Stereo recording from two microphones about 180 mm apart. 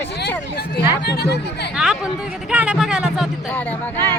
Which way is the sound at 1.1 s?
65° left (ahead or behind).